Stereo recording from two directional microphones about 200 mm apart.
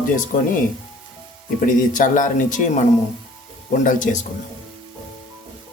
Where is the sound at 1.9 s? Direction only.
40° left (ahead or behind).